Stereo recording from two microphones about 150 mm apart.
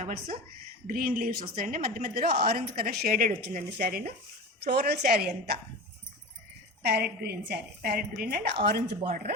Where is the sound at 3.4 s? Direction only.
90° right.